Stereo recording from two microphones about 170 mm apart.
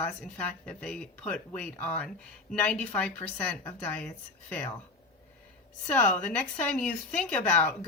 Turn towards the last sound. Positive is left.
turn(degrees=5)  # may be behind; listen again after turning